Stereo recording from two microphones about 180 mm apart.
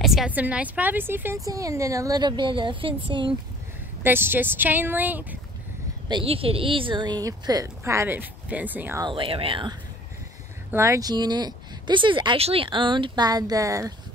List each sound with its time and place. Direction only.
0.0 s a woman's voice: centre (ahead or behind); by 3.3 s 25° right (ahead or behind)
4.0 s a woman's voice: 10° right (ahead or behind)
6.0 s speech: 30° right (ahead or behind); by 9.0 s 10° right (ahead or behind)
9.0 s speech: 30° right (ahead or behind)
10.7 s speech: 15° right (ahead or behind)